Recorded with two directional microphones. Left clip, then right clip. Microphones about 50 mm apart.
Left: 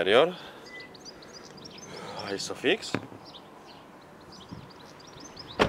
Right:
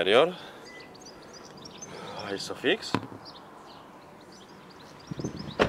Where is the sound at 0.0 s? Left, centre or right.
Centre.